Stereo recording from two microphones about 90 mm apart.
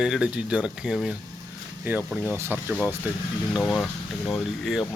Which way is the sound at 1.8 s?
20° right (ahead or behind).